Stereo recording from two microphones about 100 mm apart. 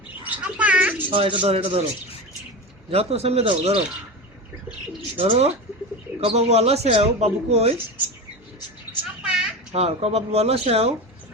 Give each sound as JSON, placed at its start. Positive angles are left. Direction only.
{"t": 0.3, "sound": "bird", "side_deg": -15}
{"t": 1.1, "sound": "a man's voice", "side_deg": -60}
{"t": 2.9, "sound": "speech", "side_deg": -85}
{"t": 5.1, "sound": "speech", "side_deg": -75}
{"t": 9.2, "sound": "a sound", "side_deg": -5}
{"t": 9.7, "sound": "speech", "side_deg": -90}